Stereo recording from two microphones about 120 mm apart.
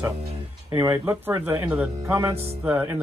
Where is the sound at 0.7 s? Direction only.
25° right (ahead or behind).